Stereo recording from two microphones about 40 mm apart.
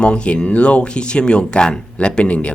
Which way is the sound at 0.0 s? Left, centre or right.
Left.